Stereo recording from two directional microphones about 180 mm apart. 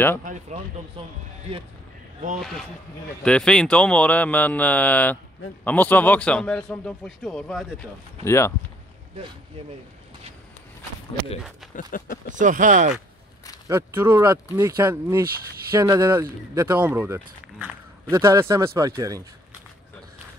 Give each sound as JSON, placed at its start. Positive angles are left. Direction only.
{"t": 0.2, "sound": "speech", "side_deg": -45}
{"t": 3.3, "sound": "speech", "side_deg": 5}
{"t": 8.2, "sound": "speech", "side_deg": 15}
{"t": 11.7, "sound": "speech", "side_deg": 45}
{"t": 12.3, "sound": "speech", "side_deg": -45}
{"t": 13.7, "sound": "a man's voice", "side_deg": -15}